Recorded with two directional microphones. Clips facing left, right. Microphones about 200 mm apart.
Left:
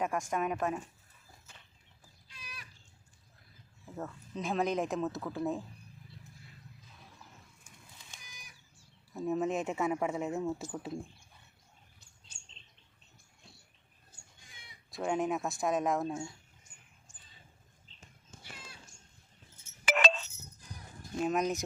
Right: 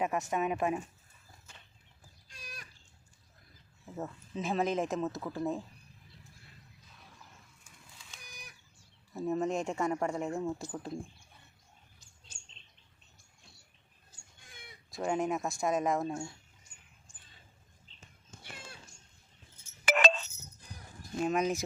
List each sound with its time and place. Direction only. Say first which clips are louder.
0.0 s speech: right 1 dB; 5° right (ahead or behind)
2.3 s goat: right 2 dB; 45° right (ahead or behind)
3.8 s speech: right 1 dB; 5° right (ahead or behind)
9.1 s speech: even; centre (ahead or behind)
14.5 s a sound: right 6 dB; 55° right (ahead or behind)
14.8 s speech: even; centre (ahead or behind)
19.8 s a sound: right 2 dB; 50° right (ahead or behind)
21.2 s speech: right 1 dB; centre (ahead or behind)